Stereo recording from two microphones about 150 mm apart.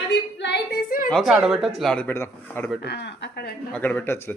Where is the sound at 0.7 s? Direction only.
70° left (ahead or behind).